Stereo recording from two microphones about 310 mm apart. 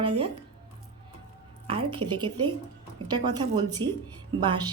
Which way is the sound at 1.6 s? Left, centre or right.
Centre.